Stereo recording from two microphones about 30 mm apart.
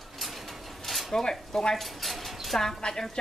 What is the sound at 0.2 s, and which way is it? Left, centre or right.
Vehicle, centre.